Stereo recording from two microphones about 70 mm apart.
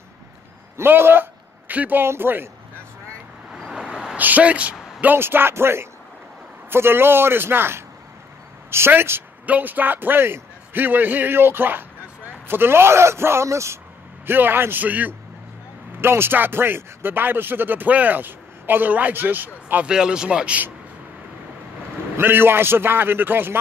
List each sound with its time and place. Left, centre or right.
0.7 s a man's voice: right
3.5 s vehicle: centre
3.8 s vehicle: centre
4.2 s speech: right
5.0 s a man's voice: right
14.2 s speech: right
16.0 s speech: right
19.9 s speech: centre
22.1 s a man's voice: right